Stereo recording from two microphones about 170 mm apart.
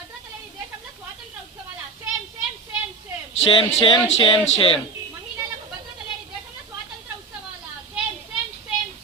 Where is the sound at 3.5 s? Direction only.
30° left (ahead or behind).